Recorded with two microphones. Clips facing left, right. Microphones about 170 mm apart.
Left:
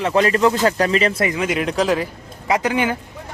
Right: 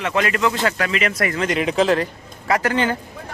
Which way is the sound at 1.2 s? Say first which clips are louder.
Left 1 dB; 15° left (ahead or behind).